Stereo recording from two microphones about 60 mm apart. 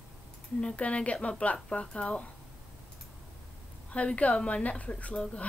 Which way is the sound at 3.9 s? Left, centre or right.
Left.